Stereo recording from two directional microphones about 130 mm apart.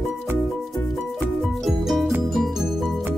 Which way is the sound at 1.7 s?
Centre (ahead or behind).